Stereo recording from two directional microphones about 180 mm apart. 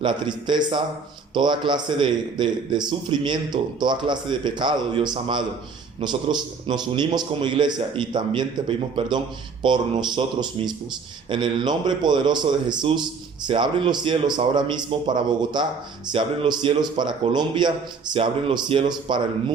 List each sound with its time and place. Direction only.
0.0 s a man's voice: 25° right (ahead or behind)